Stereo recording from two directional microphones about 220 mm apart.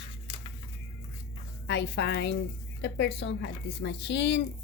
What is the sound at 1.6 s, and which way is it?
Speech, 50° left (ahead or behind).